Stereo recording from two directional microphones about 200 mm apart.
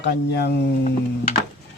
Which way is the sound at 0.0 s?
55° left (ahead or behind).